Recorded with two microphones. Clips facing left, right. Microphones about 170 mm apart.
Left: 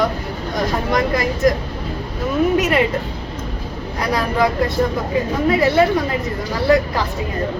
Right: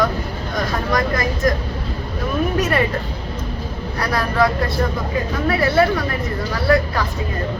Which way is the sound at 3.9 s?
15° left (ahead or behind).